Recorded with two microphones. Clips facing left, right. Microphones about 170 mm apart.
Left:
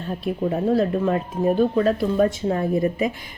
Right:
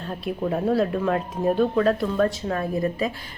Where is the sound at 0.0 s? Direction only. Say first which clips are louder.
Left 3 dB; centre (ahead or behind).